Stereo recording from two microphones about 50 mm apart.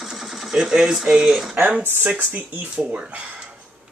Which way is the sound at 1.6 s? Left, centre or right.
Right.